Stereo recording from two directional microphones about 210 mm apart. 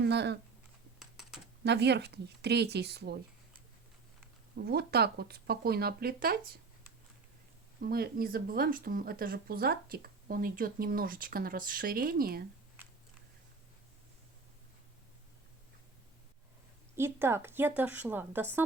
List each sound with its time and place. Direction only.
0.0 s speech: 55° right (ahead or behind)
0.9 s typing: centre (ahead or behind)
1.6 s speech: 55° right (ahead or behind)
4.5 s speech: 50° right (ahead or behind)
7.8 s speech: 45° right (ahead or behind)
16.9 s a woman's voice: 10° right (ahead or behind)